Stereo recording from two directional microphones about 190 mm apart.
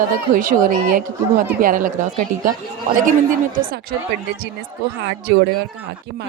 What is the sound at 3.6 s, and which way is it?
Speech, 50° right (ahead or behind).